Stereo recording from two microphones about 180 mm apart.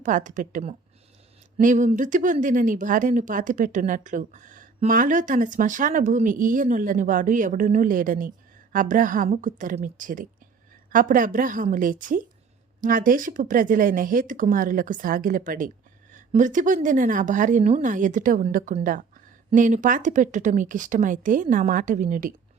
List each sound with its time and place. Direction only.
0.0 s speech: 45° right (ahead or behind)